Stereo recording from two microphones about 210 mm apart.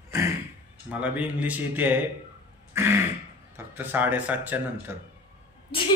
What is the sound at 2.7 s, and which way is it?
Throat clearing, 10° right (ahead or behind).